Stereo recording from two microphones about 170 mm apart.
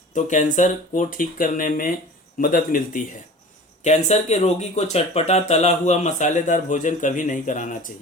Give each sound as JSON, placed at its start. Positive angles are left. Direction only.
{"t": 0.1, "sound": "speech", "side_deg": 45}
{"t": 3.8, "sound": "speech", "side_deg": 40}